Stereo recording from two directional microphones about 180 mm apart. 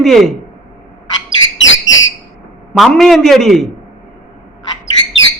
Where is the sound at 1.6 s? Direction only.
90° left.